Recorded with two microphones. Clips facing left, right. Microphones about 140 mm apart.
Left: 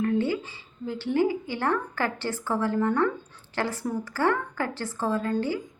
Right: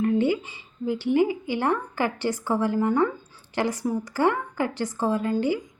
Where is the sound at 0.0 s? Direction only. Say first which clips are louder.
Right 3 dB; 15° right (ahead or behind).